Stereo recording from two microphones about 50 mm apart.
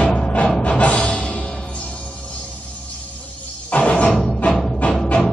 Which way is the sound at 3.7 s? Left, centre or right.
Left.